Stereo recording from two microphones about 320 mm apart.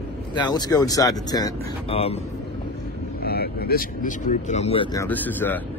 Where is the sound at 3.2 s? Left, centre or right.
Left.